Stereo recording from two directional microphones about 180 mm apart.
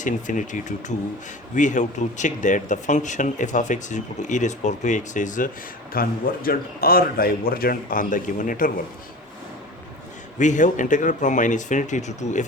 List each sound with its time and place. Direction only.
0.0 s speech: 45° left (ahead or behind)
10.3 s speech: 45° left (ahead or behind)